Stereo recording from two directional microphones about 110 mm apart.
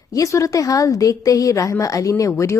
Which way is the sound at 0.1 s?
30° left (ahead or behind).